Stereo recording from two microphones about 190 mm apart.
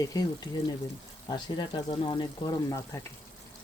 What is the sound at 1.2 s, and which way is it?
Speech, 25° left (ahead or behind).